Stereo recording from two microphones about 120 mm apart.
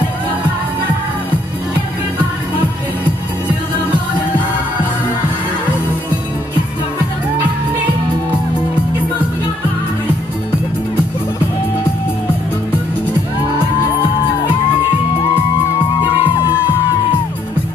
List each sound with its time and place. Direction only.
16.1 s music: 25° left (ahead or behind)